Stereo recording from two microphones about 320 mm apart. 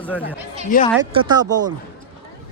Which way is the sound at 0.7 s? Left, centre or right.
Left.